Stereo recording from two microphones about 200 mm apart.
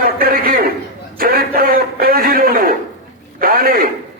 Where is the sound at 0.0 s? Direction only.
45° right (ahead or behind).